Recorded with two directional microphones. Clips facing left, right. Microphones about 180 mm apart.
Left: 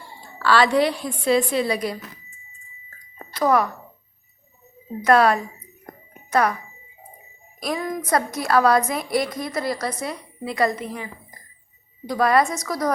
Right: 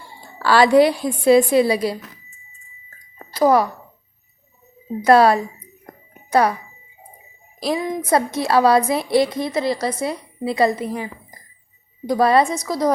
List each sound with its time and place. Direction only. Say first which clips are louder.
0.3 s music: right 3 dB; 40° right (ahead or behind)
0.8 s a woman's voice: right 6 dB; 40° right (ahead or behind)
3.3 s a woman's voice: right 4 dB; 35° right (ahead or behind)
5.0 s a woman's voice: right 4 dB; 30° right (ahead or behind)
7.9 s a woman's voice: right 2 dB; 25° right (ahead or behind)